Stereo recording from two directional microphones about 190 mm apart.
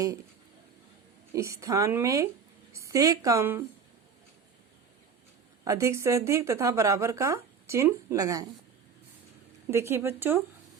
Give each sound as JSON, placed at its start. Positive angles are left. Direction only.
{"t": 1.3, "sound": "a woman's voice", "side_deg": -15}
{"t": 5.6, "sound": "a woman's voice", "side_deg": -15}
{"t": 9.6, "sound": "a woman's voice", "side_deg": -15}